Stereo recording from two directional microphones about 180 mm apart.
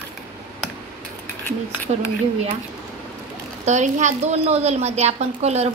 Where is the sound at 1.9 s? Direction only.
40° right (ahead or behind).